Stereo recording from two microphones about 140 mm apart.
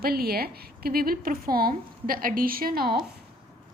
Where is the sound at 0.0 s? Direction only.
90° right.